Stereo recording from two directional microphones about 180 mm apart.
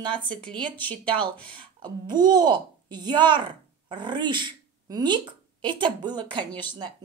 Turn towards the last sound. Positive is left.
turn(degrees=-25)  # may be behind; listen again after turning